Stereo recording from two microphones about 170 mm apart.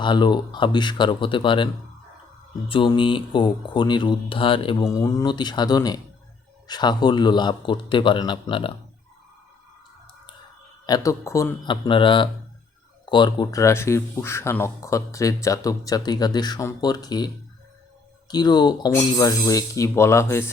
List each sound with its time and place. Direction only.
0.0 s speech: 25° left (ahead or behind)
4.8 s speech: 20° left (ahead or behind)
10.8 s speech: 20° left (ahead or behind)
18.3 s speech: 25° left (ahead or behind)